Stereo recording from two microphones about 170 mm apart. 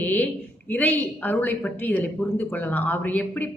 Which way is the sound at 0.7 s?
10° left (ahead or behind).